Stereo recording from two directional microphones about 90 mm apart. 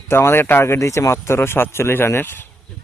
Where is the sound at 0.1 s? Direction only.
25° left (ahead or behind).